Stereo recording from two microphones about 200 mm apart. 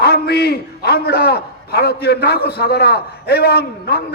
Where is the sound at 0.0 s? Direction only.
50° left (ahead or behind).